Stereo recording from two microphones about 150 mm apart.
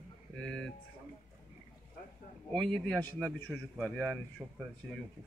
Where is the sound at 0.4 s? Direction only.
5° left (ahead or behind).